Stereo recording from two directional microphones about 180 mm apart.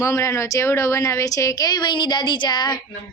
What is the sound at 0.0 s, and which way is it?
A woman's voice, 15° left (ahead or behind).